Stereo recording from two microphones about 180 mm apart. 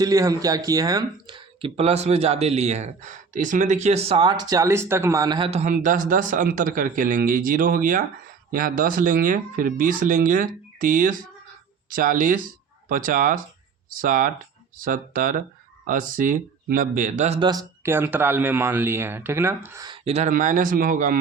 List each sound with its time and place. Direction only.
0.0 s speech: 20° right (ahead or behind)
5.5 s speech: 40° right (ahead or behind)
17.5 s speech: 15° right (ahead or behind)
20.1 s speech: 40° right (ahead or behind)